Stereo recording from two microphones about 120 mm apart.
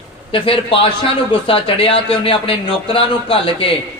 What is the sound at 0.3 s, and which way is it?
A man's voice, 50° left (ahead or behind).